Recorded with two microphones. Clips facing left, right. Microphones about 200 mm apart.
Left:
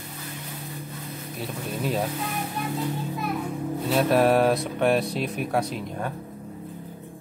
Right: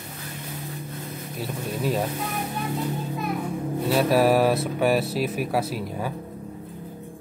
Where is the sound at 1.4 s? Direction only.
Centre (ahead or behind).